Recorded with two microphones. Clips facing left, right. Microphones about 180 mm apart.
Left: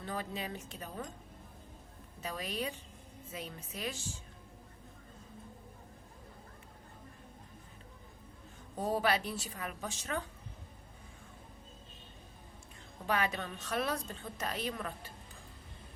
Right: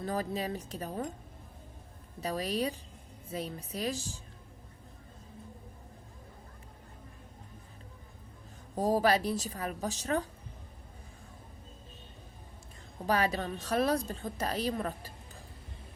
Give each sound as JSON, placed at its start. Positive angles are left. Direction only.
{"t": 0.0, "sound": "a woman's voice", "side_deg": -40}
{"t": 2.2, "sound": "a woman's voice", "side_deg": -35}
{"t": 8.7, "sound": "a woman's voice", "side_deg": -40}
{"t": 13.1, "sound": "a woman's voice", "side_deg": -35}